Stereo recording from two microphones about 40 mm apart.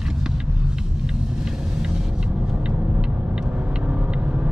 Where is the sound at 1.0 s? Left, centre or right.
Centre.